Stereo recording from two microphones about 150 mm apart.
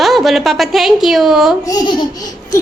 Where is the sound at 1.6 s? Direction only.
25° left (ahead or behind).